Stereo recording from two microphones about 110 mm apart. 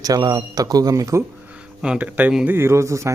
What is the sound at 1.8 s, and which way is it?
Speech, 10° right (ahead or behind).